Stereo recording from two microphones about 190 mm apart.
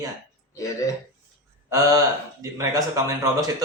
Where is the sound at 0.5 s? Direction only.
15° left (ahead or behind).